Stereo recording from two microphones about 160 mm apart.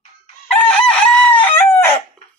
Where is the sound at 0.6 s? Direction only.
5° left (ahead or behind).